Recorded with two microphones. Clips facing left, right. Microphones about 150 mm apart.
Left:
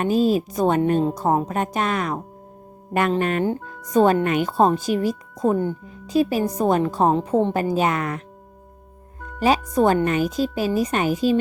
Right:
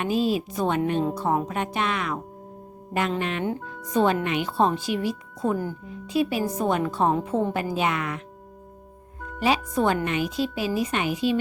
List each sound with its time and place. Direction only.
0.0 s a woman's voice: 40° left (ahead or behind)
3.6 s speech: centre (ahead or behind)
3.9 s a woman's voice: 45° left (ahead or behind)
9.4 s speech: 40° left (ahead or behind)